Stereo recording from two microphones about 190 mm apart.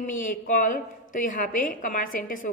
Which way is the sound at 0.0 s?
45° left (ahead or behind).